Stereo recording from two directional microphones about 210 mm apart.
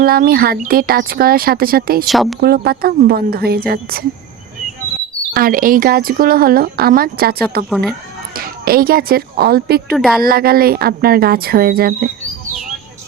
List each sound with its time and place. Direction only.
0.0 s speech: 45° right (ahead or behind)
2.0 s speech: centre (ahead or behind)
2.4 s speech: 45° right (ahead or behind)
5.3 s speech: 45° right (ahead or behind)
7.7 s speech: centre (ahead or behind)
8.4 s speech: 45° right (ahead or behind)
9.9 s speech: centre (ahead or behind)
10.2 s speech: 45° right (ahead or behind)